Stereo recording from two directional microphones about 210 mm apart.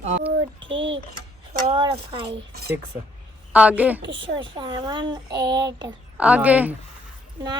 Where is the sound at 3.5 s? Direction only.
5° right (ahead or behind).